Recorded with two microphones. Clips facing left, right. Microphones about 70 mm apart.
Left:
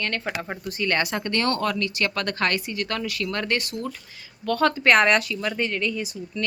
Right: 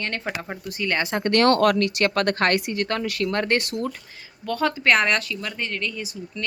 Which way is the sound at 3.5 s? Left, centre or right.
Right.